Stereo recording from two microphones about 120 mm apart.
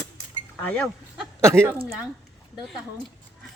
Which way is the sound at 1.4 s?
20° right (ahead or behind).